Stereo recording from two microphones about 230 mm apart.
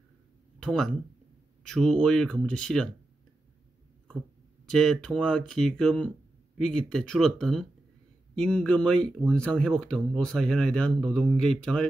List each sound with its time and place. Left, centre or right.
0.6 s speech: centre
4.6 s speech: centre